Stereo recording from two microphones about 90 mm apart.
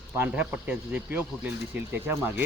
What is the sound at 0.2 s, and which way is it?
A man's voice, 15° right (ahead or behind).